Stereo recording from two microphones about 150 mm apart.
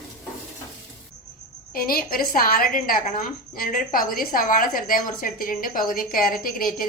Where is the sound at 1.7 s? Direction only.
80° left.